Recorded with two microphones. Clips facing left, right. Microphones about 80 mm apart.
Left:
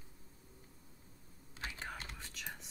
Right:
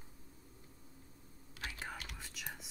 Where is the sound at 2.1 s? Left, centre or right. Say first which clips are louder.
Even; centre.